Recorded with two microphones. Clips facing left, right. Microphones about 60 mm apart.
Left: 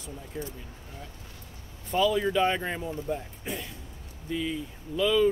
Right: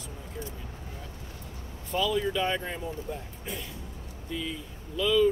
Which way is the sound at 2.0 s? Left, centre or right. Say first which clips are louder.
Left 3 dB; left.